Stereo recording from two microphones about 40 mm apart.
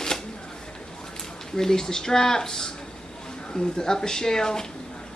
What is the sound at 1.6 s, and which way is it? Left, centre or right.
A woman's voice, centre.